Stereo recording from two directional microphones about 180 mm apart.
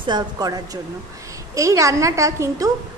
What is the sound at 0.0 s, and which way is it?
A woman's voice, 20° right (ahead or behind).